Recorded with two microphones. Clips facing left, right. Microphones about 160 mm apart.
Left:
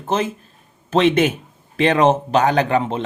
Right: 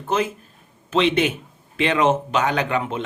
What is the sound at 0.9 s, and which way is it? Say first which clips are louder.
A man's voice: left 4 dB; 45° left (ahead or behind).